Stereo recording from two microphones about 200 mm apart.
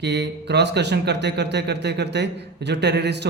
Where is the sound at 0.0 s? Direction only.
55° right (ahead or behind).